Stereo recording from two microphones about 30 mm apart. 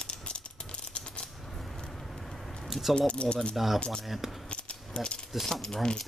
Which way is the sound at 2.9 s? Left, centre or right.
Left.